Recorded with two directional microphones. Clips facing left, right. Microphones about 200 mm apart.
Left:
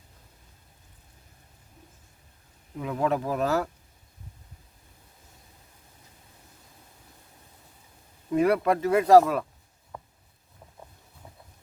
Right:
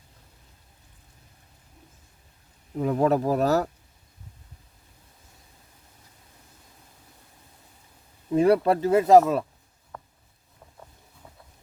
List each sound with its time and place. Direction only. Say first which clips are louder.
2.7 s speech: right 5 dB; 40° right (ahead or behind)
8.3 s speech: right 3 dB; 30° right (ahead or behind)
9.9 s a sound: even; 15° left (ahead or behind)